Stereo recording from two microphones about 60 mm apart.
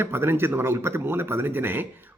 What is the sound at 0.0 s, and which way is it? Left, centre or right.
A man's voice, right.